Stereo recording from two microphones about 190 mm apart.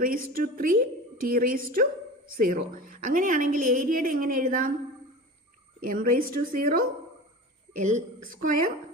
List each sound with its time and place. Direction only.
0.0 s a woman's voice: 50° right (ahead or behind)
5.9 s a woman's voice: 45° right (ahead or behind)